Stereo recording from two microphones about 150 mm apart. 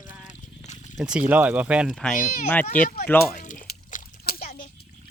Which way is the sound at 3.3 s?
60° left (ahead or behind).